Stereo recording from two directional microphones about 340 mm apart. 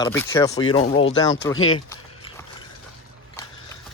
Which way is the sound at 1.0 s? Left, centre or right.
Left.